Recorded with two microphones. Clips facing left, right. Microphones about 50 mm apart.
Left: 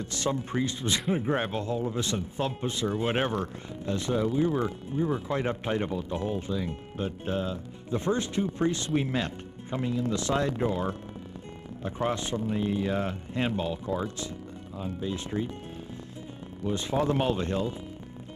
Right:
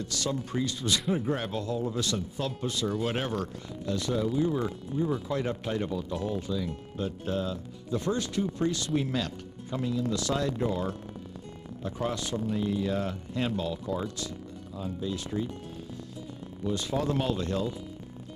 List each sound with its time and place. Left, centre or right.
0.0 s speech: left
16.6 s speech: left